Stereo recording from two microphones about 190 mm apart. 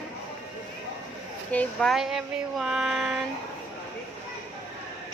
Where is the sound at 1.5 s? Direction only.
5° left (ahead or behind).